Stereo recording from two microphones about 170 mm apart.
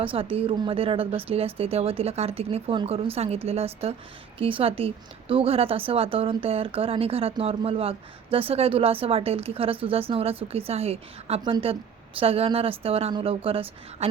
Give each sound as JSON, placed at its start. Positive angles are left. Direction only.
{"t": 0.0, "sound": "speech", "side_deg": -30}